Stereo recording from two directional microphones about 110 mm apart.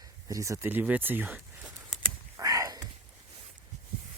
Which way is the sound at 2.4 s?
35° right (ahead or behind).